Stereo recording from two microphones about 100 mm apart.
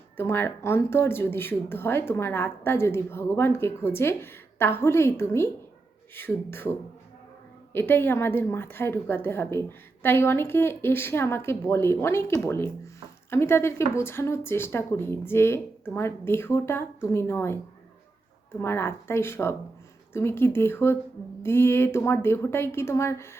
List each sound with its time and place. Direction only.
0.2 s speech: 25° left (ahead or behind)
18.6 s speech: 25° left (ahead or behind)